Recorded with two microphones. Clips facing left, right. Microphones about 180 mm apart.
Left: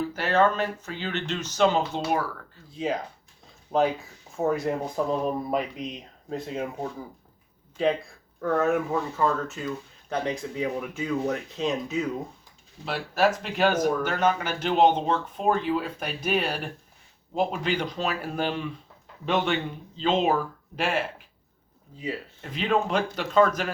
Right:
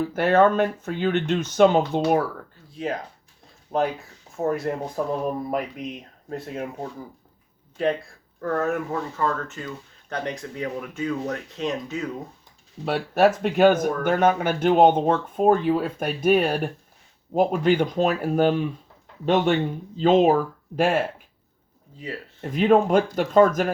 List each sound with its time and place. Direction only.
0.0 s speech: 55° right (ahead or behind)
2.7 s speech: centre (ahead or behind)
8.4 s speech: centre (ahead or behind)
12.8 s speech: 50° right (ahead or behind)
22.4 s speech: 45° right (ahead or behind)